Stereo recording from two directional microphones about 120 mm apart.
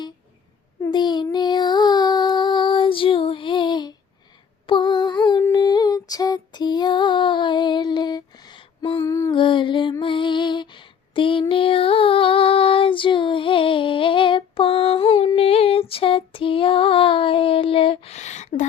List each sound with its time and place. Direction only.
0.9 s child singing: 35° left (ahead or behind)
4.6 s music: 45° left (ahead or behind)
5.5 s female singing: 35° left (ahead or behind)
9.0 s music: 25° left (ahead or behind)
9.3 s music: 45° left (ahead or behind)
10.0 s female singing: 45° left (ahead or behind); by 18.6 s 80° left